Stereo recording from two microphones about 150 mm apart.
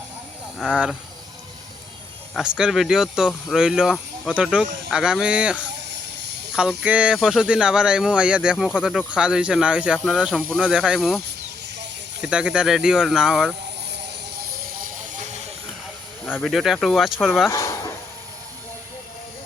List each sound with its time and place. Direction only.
2.3 s speech: 5° right (ahead or behind)
6.8 s speech: 10° right (ahead or behind)
12.2 s speech: 5° right (ahead or behind)
14.3 s a sound: 85° right; by 15.2 s 60° right (ahead or behind)
16.2 s speech: 5° left (ahead or behind)
17.5 s a sound: 20° left (ahead or behind)